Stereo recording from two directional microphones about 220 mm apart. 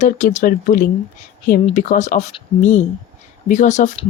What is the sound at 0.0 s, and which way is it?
Speech, 35° left (ahead or behind).